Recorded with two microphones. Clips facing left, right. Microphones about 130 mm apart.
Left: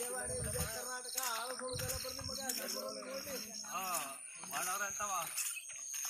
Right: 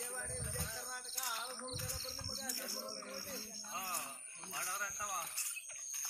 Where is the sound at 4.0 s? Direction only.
90° left.